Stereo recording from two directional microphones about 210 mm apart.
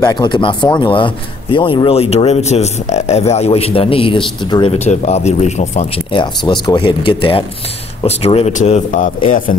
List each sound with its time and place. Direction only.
0.0 s speech: 20° left (ahead or behind)
6.4 s speech: 20° left (ahead or behind); by 9.6 s 40° left (ahead or behind)